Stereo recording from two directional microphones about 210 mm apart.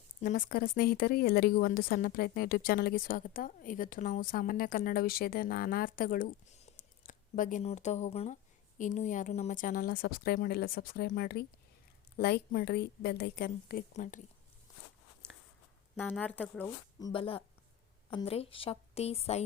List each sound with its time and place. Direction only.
0.2 s speech: 40° left (ahead or behind)
16.0 s speech: 5° left (ahead or behind)
16.6 s a woman's voice: 20° left (ahead or behind)